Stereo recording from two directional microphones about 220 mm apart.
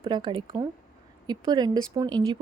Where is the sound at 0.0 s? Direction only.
20° right (ahead or behind).